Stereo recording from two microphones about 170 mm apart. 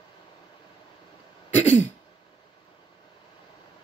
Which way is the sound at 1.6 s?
45° left (ahead or behind).